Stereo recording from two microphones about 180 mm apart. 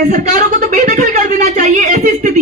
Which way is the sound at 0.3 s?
45° right (ahead or behind).